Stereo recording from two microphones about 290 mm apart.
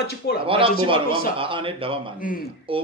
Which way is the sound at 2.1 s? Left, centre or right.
Left.